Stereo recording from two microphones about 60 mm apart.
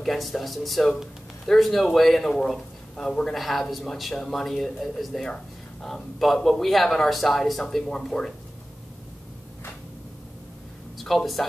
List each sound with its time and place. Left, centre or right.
0.0 s speech: centre
11.1 s speech: centre